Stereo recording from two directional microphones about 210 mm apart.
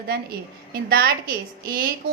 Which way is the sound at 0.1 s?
50° right (ahead or behind).